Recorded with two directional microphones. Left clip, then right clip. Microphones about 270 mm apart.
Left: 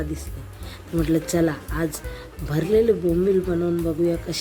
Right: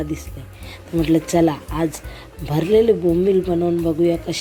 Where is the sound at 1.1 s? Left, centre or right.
Centre.